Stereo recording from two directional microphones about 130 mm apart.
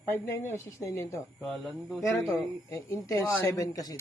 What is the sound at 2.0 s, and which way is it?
Speech, 25° left (ahead or behind).